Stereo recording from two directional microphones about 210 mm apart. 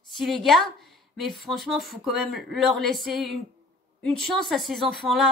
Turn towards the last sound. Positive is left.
turn(degrees=0)  # may be behind; listen again after turning